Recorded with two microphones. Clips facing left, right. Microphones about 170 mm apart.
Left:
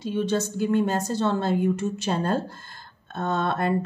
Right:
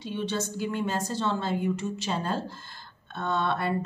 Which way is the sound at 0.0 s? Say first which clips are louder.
Left 6 dB; 45° left (ahead or behind).